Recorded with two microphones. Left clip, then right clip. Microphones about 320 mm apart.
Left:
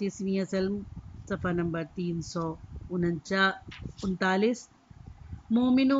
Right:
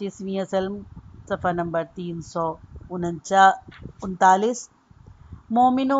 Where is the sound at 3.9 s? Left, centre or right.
Right.